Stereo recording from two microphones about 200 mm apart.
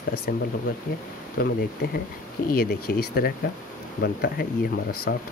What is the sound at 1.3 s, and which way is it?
Speech, 50° left (ahead or behind).